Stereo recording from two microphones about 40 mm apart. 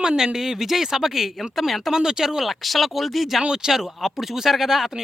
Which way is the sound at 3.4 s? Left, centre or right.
Centre.